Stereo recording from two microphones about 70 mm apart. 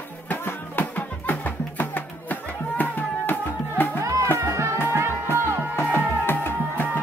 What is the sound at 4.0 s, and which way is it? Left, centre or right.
Music, right.